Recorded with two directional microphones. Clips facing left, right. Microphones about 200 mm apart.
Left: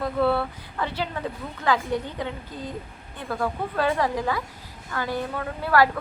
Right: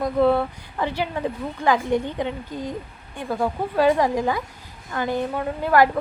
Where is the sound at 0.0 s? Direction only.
15° right (ahead or behind).